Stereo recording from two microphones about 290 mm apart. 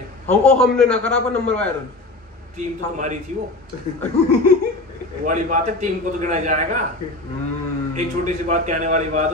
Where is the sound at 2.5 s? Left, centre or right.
Right.